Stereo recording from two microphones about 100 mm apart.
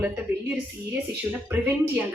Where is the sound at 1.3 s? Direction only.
15° right (ahead or behind).